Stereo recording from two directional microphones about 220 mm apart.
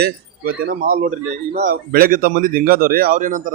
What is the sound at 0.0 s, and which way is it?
Speech, 45° right (ahead or behind).